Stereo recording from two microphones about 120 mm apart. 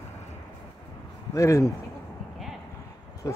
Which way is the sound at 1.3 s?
25° left (ahead or behind).